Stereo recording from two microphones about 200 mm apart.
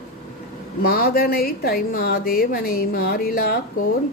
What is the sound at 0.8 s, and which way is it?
Speech, 50° left (ahead or behind).